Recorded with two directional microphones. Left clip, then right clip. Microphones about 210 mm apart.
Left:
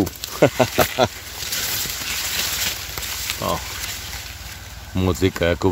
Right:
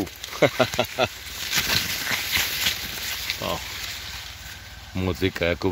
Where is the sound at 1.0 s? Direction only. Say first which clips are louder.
Left 3 dB; 20° left (ahead or behind).